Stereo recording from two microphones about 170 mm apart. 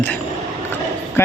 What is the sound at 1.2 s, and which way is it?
Speech, 15° left (ahead or behind).